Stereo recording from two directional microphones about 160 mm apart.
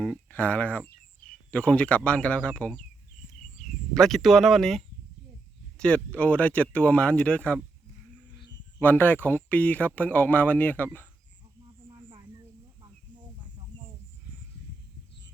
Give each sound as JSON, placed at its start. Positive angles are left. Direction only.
{"t": 0.0, "sound": "speech", "side_deg": 5}
{"t": 3.9, "sound": "speech", "side_deg": 0}
{"t": 5.8, "sound": "speech", "side_deg": 10}
{"t": 8.8, "sound": "speech", "side_deg": 10}